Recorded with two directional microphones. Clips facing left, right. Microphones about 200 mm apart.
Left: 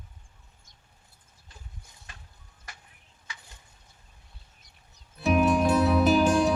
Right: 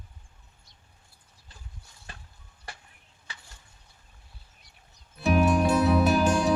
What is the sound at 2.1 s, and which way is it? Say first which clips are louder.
Ice cream truck: right 5 dB; 35° right (ahead or behind).